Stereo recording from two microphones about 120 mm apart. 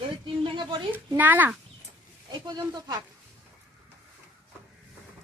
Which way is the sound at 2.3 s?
35° right (ahead or behind).